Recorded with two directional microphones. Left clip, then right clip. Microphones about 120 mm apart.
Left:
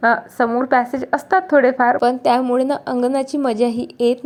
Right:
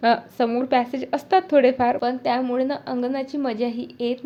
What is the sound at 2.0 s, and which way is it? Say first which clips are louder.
A woman's voice: left 7 dB; 60° left (ahead or behind).